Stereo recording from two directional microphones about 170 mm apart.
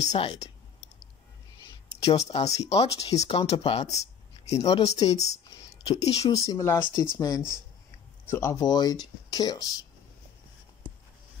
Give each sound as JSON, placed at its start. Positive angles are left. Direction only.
{"t": 0.0, "sound": "speech", "side_deg": 35}
{"t": 2.0, "sound": "speech", "side_deg": 40}
{"t": 6.3, "sound": "speech", "side_deg": 20}